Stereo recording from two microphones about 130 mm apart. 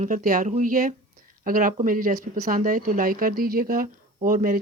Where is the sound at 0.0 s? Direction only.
90° right.